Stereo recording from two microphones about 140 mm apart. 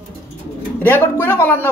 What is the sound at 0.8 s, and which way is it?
Speech, 15° left (ahead or behind).